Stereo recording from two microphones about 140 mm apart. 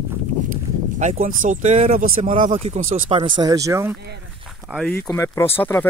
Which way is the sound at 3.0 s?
40° right (ahead or behind).